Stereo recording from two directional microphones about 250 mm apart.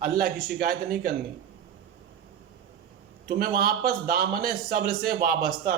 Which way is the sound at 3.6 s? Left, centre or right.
Right.